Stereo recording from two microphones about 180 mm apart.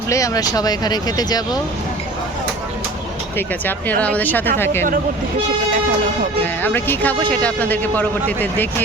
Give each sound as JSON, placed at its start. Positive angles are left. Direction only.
{"t": 0.1, "sound": "speech", "side_deg": 20}
{"t": 3.3, "sound": "speech", "side_deg": 10}
{"t": 6.4, "sound": "speech", "side_deg": 10}